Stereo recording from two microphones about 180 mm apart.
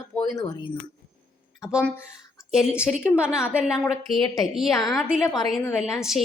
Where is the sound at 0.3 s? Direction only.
20° left (ahead or behind).